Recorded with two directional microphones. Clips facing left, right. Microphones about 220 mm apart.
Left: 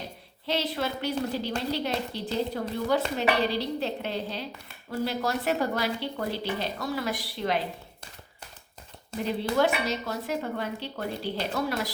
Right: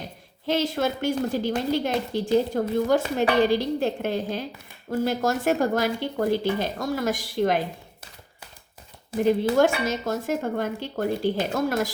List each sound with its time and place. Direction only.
0.4 s speech: 45° right (ahead or behind)
9.2 s speech: 45° right (ahead or behind)